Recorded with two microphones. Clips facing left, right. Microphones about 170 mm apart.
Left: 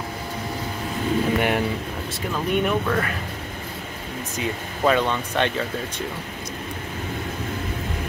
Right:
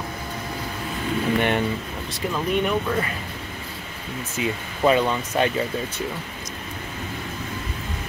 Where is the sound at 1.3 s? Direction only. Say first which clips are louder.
Even; 5° left (ahead or behind).